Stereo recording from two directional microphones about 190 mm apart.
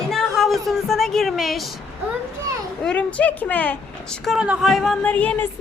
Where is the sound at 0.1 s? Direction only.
Centre (ahead or behind).